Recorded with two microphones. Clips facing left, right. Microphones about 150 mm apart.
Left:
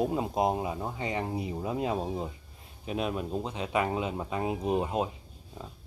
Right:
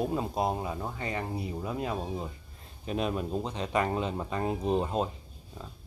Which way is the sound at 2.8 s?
5° left (ahead or behind).